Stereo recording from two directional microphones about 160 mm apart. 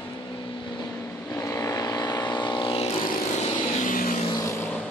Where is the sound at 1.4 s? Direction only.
20° left (ahead or behind); by 2.9 s 35° left (ahead or behind).